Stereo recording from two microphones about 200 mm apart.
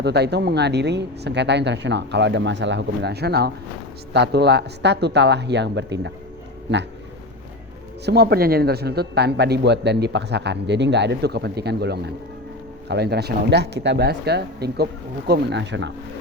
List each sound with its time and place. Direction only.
0.0 s speech: 55° right (ahead or behind)
8.0 s speech: 55° right (ahead or behind)